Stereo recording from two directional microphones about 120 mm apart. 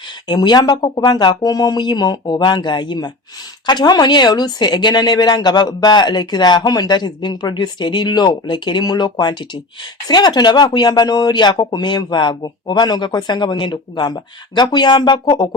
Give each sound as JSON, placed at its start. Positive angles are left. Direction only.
{"t": 0.3, "sound": "speech", "side_deg": 35}